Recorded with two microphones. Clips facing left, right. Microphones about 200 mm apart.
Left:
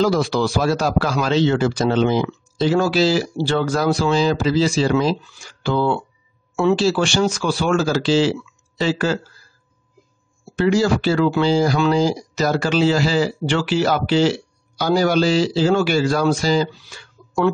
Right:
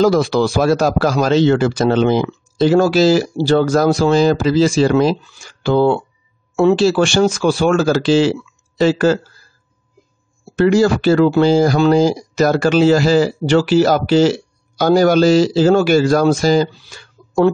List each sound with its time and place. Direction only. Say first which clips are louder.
0.0 s speech: right 5 dB; 50° right (ahead or behind)
10.5 s speech: right 4 dB; 50° right (ahead or behind)